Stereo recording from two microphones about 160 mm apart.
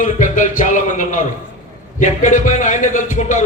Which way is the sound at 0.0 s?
55° left (ahead or behind).